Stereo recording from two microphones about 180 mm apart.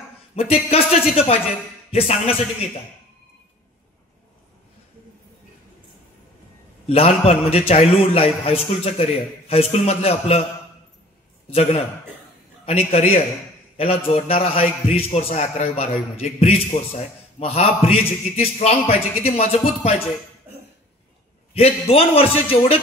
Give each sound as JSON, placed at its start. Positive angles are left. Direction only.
{"t": 0.4, "sound": "a man's voice", "side_deg": 35}
{"t": 6.9, "sound": "a man's voice", "side_deg": 35}
{"t": 12.6, "sound": "a man's voice", "side_deg": 35}
{"t": 21.5, "sound": "a man's voice", "side_deg": 35}